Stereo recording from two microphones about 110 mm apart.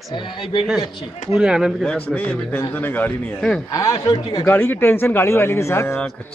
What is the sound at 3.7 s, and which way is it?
Speech, 30° left (ahead or behind).